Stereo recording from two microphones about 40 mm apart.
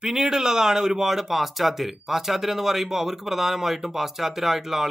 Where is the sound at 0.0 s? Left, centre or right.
Centre.